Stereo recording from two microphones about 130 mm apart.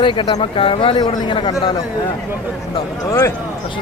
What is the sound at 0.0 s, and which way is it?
Speech, 40° left (ahead or behind).